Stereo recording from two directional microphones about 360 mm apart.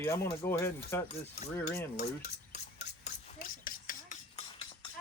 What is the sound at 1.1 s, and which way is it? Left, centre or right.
Cutlery, centre.